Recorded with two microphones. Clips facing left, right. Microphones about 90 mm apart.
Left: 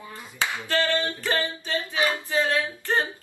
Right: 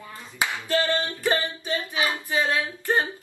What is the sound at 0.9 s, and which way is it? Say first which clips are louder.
Speech: right 1 dB; 20° right (ahead or behind).